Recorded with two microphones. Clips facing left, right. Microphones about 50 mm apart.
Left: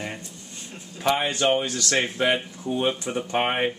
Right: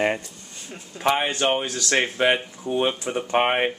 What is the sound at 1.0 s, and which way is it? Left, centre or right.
Speech, centre.